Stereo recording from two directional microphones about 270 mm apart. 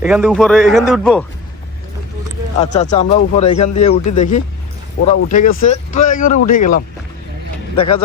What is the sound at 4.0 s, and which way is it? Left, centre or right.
Speech, left.